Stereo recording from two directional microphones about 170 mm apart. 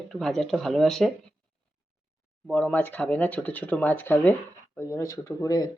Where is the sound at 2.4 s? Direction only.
Centre (ahead or behind).